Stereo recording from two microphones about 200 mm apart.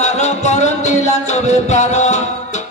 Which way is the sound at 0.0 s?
35° left (ahead or behind).